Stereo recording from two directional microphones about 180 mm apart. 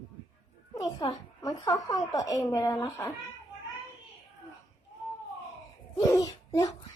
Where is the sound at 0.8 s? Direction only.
20° left (ahead or behind).